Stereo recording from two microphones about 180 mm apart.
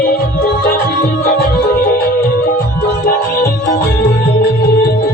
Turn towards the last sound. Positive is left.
turn(degrees=60)  # may be behind; listen again after turning